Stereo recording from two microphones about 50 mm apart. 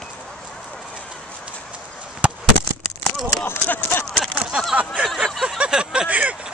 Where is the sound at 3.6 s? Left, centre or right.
Left.